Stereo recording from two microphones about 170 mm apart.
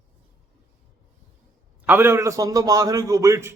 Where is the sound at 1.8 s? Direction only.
15° right (ahead or behind).